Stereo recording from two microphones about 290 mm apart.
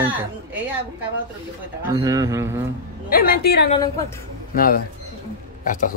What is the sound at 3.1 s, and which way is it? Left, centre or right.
A woman's voice, left.